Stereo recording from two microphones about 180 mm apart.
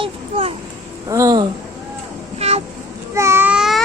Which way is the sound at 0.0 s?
35° right (ahead or behind).